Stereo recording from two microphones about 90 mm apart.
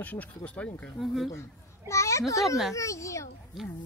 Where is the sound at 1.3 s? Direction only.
35° left (ahead or behind).